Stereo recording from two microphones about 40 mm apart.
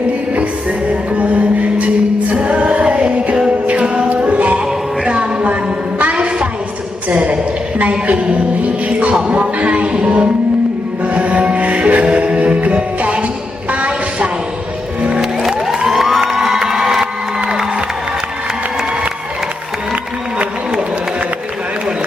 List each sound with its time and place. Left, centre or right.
0.9 s music: right
3.8 s music: right
7.1 s a sound: right
7.8 s a woman's voice: right
9.3 s music: right
13.7 s a sound: right
15.2 s music: centre
15.9 s a sound: centre
16.2 s crowd: centre